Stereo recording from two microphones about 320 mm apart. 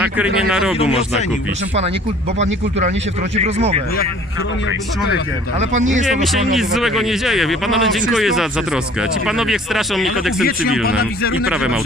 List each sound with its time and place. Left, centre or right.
0.0 s speech: centre
3.3 s speech: centre
5.5 s speech: right
6.5 s speech: centre